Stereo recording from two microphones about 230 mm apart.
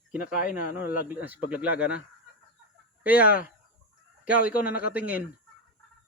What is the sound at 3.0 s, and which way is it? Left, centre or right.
Speech, centre.